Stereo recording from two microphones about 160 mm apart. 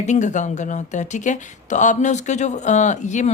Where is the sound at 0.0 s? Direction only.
50° left (ahead or behind).